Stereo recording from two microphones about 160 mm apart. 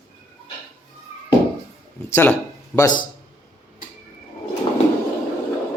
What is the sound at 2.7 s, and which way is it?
Speech, 25° left (ahead or behind).